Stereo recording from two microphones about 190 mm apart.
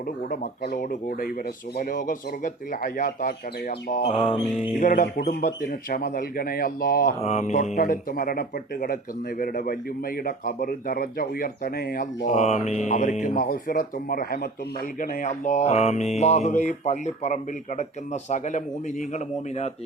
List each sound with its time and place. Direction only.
0.3 s speech: 55° left (ahead or behind)
4.0 s mantra: 30° left (ahead or behind)
4.7 s speech: 45° left (ahead or behind)
7.2 s mantra: 35° left (ahead or behind)
7.8 s speech: 50° left (ahead or behind)
12.3 s mantra: 35° left (ahead or behind); by 14.5 s 50° left (ahead or behind)
15.0 s mantra: 40° left (ahead or behind)